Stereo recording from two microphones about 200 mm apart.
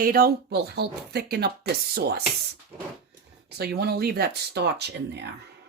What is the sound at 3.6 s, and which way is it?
Speech, 50° right (ahead or behind).